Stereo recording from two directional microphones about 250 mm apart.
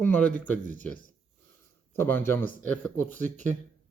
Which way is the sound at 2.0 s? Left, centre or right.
Centre.